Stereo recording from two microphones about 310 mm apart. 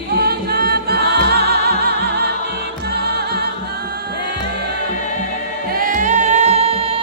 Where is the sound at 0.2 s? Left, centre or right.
Right.